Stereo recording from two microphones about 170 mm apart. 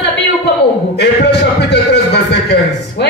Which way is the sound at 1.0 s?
90° left.